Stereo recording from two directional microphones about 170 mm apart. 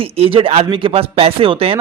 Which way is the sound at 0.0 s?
35° right (ahead or behind).